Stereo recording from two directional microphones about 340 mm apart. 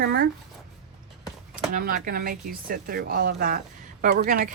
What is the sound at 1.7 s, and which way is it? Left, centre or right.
Speech, right.